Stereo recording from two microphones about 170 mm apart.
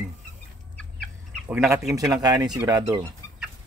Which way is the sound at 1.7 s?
20° right (ahead or behind).